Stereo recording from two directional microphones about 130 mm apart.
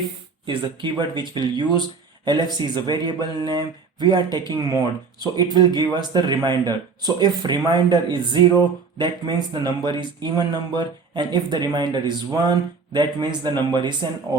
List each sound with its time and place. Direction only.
0.4 s speech: 35° right (ahead or behind)